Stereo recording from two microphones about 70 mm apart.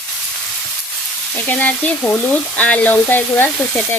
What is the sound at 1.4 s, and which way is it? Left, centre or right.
Frying, left.